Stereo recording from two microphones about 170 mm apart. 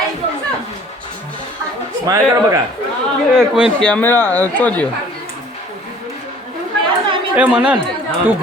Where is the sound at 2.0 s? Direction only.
20° right (ahead or behind).